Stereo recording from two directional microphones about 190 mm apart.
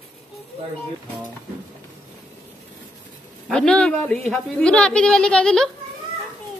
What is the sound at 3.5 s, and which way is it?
A woman's voice, 5° left (ahead or behind).